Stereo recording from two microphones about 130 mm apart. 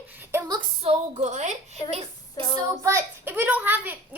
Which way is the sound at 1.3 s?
60° right (ahead or behind).